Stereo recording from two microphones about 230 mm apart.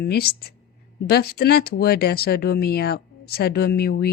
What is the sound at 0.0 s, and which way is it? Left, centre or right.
Speech, left.